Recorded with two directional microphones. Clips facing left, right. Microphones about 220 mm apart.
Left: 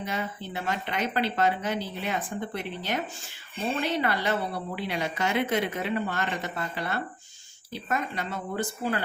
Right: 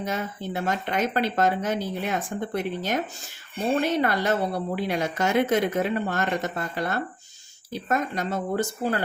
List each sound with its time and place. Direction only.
0.0 s a woman's voice: 45° right (ahead or behind)